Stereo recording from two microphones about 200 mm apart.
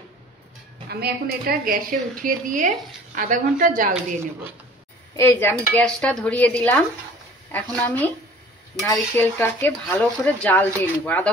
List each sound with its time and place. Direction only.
0.8 s a woman's voice: 55° right (ahead or behind)
5.1 s speech: 10° left (ahead or behind)